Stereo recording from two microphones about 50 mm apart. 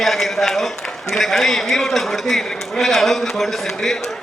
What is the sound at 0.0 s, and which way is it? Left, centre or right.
A man's voice, centre.